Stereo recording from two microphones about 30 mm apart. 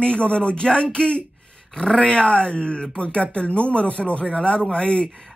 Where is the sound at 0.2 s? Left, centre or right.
Left.